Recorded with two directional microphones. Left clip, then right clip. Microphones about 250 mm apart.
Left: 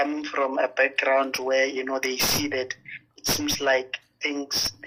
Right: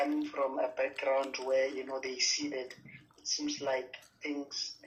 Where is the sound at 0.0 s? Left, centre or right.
Left.